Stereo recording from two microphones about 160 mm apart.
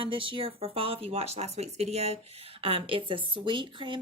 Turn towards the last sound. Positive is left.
turn(degrees=-30)  # may be behind; listen again after turning